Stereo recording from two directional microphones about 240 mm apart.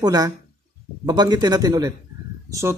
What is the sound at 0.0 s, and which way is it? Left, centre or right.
Speech, centre.